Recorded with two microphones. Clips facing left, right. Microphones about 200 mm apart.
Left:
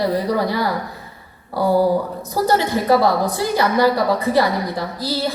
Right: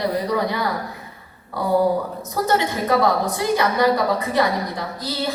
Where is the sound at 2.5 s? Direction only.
35° left (ahead or behind).